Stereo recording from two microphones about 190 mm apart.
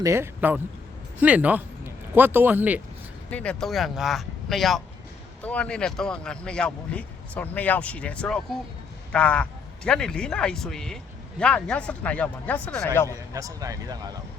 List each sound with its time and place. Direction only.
0.0 s a man's voice: 15° right (ahead or behind)
3.2 s speech: 5° left (ahead or behind)
13.1 s a man's voice: 15° right (ahead or behind)